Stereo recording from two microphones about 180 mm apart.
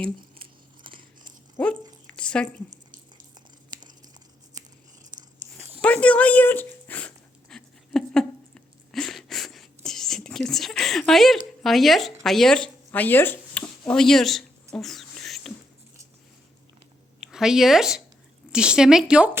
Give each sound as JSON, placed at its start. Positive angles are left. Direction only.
{"t": 0.9, "sound": "biting", "side_deg": -30}
{"t": 2.1, "sound": "a sound", "side_deg": 5}
{"t": 3.7, "sound": "crumpling", "side_deg": -25}
{"t": 5.1, "sound": "biting", "side_deg": -40}
{"t": 5.8, "sound": "speech", "side_deg": 5}
{"t": 7.5, "sound": "a sound", "side_deg": 5}
{"t": 11.6, "sound": "speech", "side_deg": 0}
{"t": 12.2, "sound": "a sound", "side_deg": 0}
{"t": 17.2, "sound": "speech", "side_deg": 0}